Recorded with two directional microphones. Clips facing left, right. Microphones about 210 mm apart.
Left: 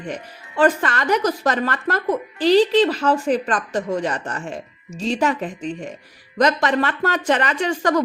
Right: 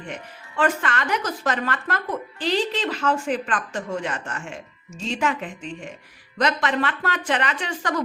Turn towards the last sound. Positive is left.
turn(degrees=40)  # may be behind; listen again after turning